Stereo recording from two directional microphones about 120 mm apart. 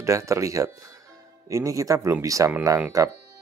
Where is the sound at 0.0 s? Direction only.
25° right (ahead or behind).